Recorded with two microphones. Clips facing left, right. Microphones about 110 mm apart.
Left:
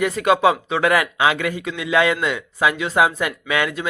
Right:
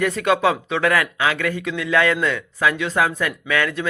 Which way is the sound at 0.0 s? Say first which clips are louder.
Left 2 dB; 10° left (ahead or behind).